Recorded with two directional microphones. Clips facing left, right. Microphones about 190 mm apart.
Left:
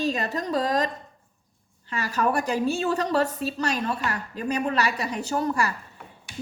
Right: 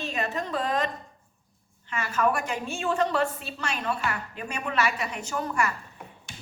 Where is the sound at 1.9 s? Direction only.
35° left (ahead or behind).